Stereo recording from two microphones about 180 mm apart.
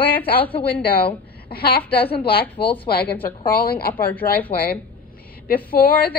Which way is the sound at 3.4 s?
55° left (ahead or behind).